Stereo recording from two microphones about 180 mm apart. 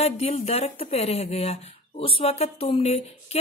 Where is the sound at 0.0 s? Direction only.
35° left (ahead or behind).